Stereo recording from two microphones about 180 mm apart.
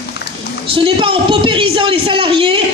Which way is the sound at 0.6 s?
30° right (ahead or behind).